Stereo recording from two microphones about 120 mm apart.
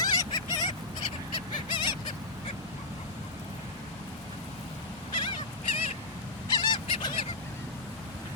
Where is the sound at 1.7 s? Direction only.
40° left (ahead or behind).